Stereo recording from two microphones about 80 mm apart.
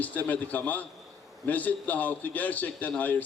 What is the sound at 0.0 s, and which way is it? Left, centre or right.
A man's voice, left.